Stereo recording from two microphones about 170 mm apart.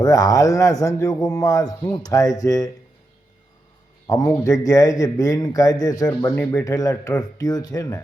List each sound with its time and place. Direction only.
0.0 s a man's voice: 20° left (ahead or behind)
4.0 s a man's voice: 20° left (ahead or behind)